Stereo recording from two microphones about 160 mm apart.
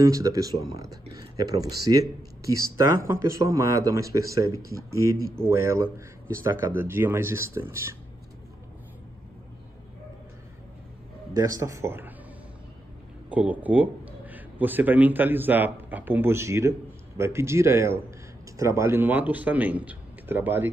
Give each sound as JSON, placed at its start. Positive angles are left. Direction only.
{"t": 0.0, "sound": "speech", "side_deg": -20}
{"t": 11.3, "sound": "speech", "side_deg": -20}
{"t": 13.3, "sound": "speech", "side_deg": -10}